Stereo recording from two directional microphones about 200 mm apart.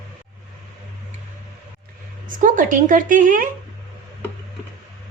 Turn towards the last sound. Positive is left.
turn(degrees=-40)  # may be behind; listen again after turning